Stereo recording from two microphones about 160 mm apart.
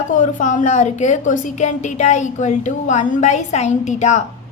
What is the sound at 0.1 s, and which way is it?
A woman's voice, 55° left (ahead or behind).